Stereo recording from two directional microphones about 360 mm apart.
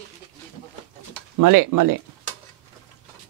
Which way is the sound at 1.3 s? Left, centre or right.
Right.